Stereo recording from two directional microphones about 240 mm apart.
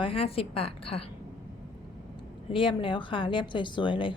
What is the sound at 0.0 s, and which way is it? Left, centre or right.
A woman's voice, left.